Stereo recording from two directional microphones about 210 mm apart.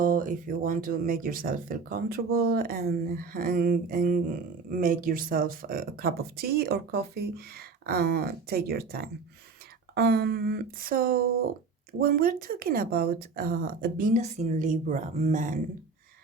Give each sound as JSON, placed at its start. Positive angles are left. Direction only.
{"t": 0.0, "sound": "speech", "side_deg": -40}